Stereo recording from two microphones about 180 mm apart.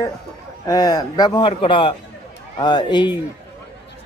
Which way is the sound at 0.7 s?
20° left (ahead or behind).